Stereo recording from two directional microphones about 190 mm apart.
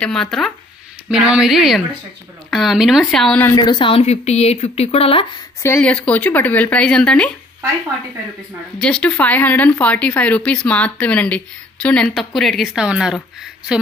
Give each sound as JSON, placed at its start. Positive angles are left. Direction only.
{"t": 0.0, "sound": "a woman's voice", "side_deg": 5}
{"t": 5.6, "sound": "speech", "side_deg": 10}
{"t": 8.8, "sound": "a woman's voice", "side_deg": 5}